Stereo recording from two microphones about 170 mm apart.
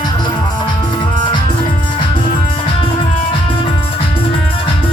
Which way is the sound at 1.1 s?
25° left (ahead or behind).